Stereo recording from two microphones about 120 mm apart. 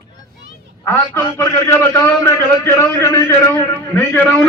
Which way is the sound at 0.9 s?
25° left (ahead or behind).